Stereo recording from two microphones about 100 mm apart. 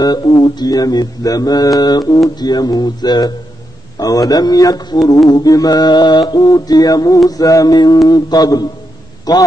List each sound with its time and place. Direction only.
0.0 s mantra: 40° left (ahead or behind)
2.2 s speech: 40° left (ahead or behind)
4.0 s mantra: 40° left (ahead or behind)